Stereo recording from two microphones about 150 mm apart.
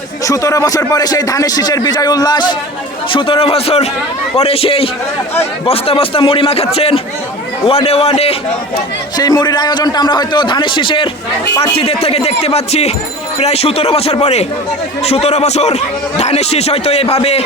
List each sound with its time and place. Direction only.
0.3 s a man's voice: 20° left (ahead or behind); by 8.4 s 40° left (ahead or behind)
9.1 s a man's voice: 25° left (ahead or behind); by 17.4 s 45° left (ahead or behind)